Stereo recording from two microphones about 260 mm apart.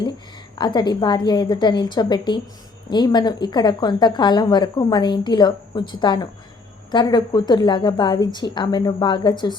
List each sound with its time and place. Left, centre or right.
0.6 s a woman's voice: centre